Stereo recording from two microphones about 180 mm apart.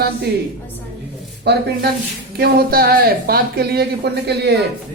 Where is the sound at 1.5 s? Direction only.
65° right (ahead or behind).